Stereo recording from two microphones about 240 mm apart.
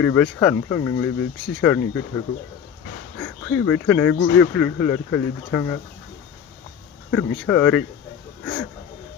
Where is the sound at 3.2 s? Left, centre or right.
Centre.